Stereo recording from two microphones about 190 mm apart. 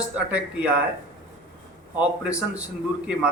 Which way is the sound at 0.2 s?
5° right (ahead or behind).